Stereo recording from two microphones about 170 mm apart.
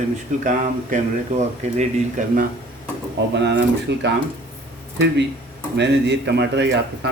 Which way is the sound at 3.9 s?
75° right (ahead or behind).